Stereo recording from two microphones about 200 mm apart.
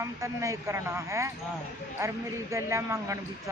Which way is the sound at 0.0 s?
15° right (ahead or behind).